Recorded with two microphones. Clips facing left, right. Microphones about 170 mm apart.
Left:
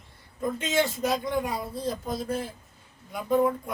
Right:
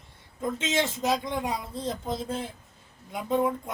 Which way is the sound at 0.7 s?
25° right (ahead or behind).